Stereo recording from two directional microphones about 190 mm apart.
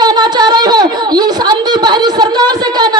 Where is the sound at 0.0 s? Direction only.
20° right (ahead or behind).